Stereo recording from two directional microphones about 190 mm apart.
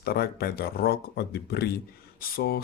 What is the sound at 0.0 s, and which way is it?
Speech, 55° left (ahead or behind).